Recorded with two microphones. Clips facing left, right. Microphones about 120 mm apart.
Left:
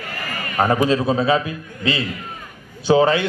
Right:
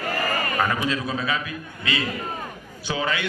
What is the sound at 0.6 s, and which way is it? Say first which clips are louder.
A man's voice: left 11 dB; 35° left (ahead or behind).